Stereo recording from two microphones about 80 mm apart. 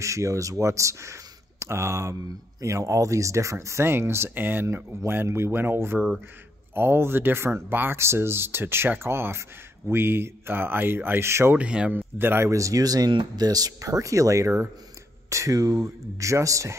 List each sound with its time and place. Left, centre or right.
0.0 s speech: right
11.5 s speech: centre
11.9 s speech: right
12.4 s speech: right